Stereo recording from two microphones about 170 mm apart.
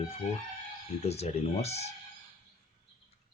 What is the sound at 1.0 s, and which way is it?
Speech, 40° left (ahead or behind).